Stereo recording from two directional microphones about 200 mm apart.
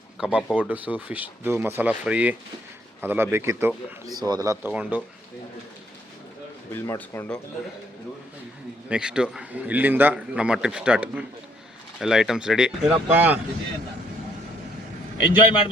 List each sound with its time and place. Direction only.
0.2 s a man's voice: 5° right (ahead or behind)
4.7 s speech: 5° right (ahead or behind)
6.7 s speech: 15° left (ahead or behind)
8.9 s a man's voice: 5° right (ahead or behind)
15.3 s a man's voice: 20° left (ahead or behind)